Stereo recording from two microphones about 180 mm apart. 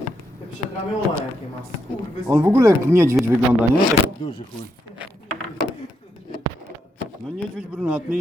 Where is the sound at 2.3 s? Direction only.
15° right (ahead or behind).